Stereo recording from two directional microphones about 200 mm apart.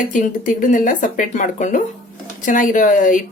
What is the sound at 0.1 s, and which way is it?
Speech, 40° left (ahead or behind).